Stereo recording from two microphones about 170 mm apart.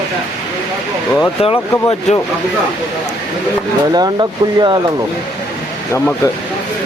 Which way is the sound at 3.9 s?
25° right (ahead or behind).